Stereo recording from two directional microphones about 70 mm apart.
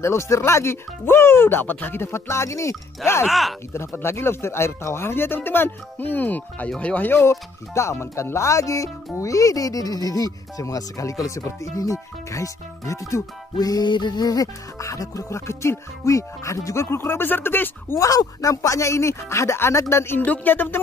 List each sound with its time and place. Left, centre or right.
0.0 s speech: left
3.3 s speech: centre
3.7 s speech: left; by 7.1 s centre
7.1 s speech: left
16.8 s speech: left
17.9 s speech: left
20.2 s speech: left